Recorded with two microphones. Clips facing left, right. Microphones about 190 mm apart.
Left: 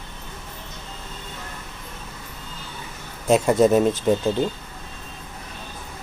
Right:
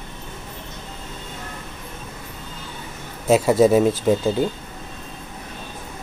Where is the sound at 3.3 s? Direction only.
5° right (ahead or behind).